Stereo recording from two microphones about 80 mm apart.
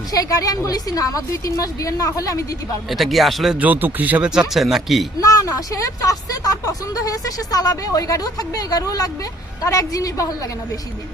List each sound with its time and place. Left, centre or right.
0.1 s speech: left
2.9 s speech: centre
3.6 s speech: right
4.3 s speech: centre
5.2 s speech: left